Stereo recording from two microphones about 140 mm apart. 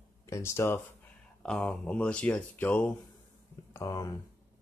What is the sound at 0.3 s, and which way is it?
Speech, 20° left (ahead or behind).